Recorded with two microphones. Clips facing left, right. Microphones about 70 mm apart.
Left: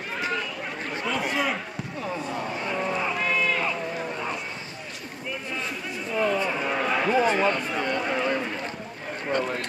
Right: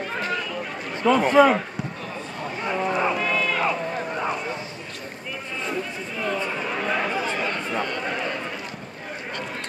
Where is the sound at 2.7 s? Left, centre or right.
Centre.